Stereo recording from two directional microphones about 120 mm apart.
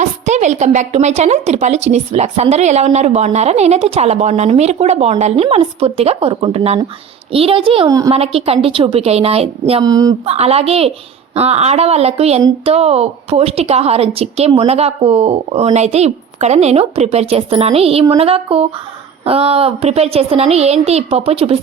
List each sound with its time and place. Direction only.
0.0 s a woman's voice: 75° right (ahead or behind); by 7.9 s 50° right (ahead or behind)
7.9 s a woman's voice: 30° right (ahead or behind)
8.1 s a woman's voice: 55° right (ahead or behind)
9.8 s speech: 30° right (ahead or behind)
10.2 s a woman's voice: 60° right (ahead or behind)